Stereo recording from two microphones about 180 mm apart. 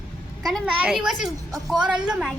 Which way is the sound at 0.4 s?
5° right (ahead or behind).